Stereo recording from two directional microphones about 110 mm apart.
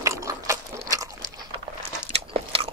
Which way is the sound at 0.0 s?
30° right (ahead or behind).